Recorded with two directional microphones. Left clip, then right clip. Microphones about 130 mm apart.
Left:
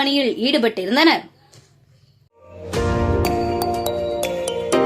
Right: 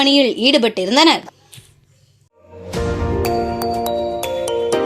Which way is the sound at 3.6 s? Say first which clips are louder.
Right 2 dB; centre (ahead or behind).